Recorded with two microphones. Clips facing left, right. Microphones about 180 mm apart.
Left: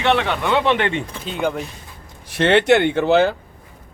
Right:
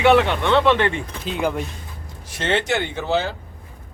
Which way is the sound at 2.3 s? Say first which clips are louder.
Left 8 dB; 65° left (ahead or behind).